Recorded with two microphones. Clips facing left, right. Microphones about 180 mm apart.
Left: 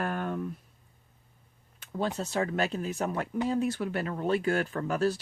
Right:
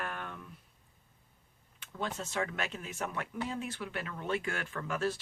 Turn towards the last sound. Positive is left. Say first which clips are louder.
# left 6 dB
turn(degrees=40)  # may be behind; listen again after turning